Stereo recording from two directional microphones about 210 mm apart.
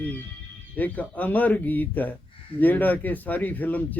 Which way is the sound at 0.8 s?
5° left (ahead or behind).